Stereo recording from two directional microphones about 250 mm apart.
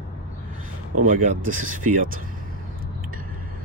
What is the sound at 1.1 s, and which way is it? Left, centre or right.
Speech, right.